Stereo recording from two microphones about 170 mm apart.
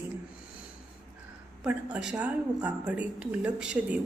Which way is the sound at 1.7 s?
5° right (ahead or behind).